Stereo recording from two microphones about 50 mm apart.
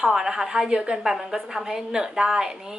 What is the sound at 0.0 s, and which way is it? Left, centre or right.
A woman's voice, centre.